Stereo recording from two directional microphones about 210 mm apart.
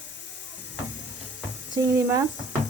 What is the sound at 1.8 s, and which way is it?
Speech, 15° right (ahead or behind).